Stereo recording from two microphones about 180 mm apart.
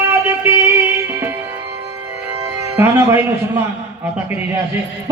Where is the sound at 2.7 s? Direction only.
15° right (ahead or behind).